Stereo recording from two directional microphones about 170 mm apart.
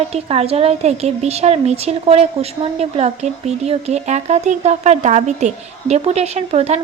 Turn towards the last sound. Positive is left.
turn(degrees=-40)  # may be behind; listen again after turning